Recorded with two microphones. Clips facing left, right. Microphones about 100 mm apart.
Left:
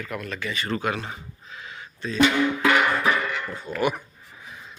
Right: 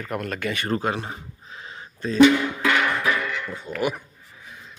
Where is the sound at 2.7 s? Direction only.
10° left (ahead or behind).